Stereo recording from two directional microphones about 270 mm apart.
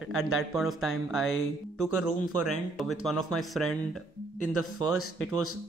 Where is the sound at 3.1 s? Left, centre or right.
Centre.